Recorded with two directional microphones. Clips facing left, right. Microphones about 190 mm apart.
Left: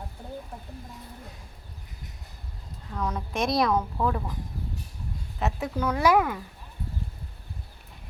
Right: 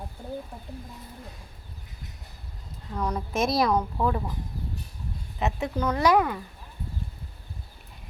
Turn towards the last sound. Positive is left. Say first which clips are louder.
# even
turn(degrees=5)  # may be behind; listen again after turning